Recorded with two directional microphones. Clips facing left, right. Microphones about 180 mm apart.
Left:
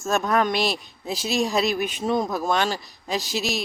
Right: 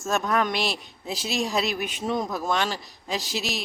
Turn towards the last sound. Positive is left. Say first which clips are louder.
# left 3 dB
turn(degrees=45)  # may be behind; listen again after turning